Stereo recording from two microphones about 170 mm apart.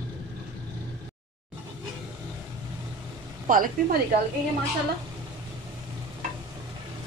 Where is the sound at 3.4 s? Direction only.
55° right (ahead or behind).